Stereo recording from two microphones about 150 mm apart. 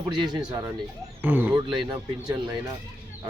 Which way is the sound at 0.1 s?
30° right (ahead or behind).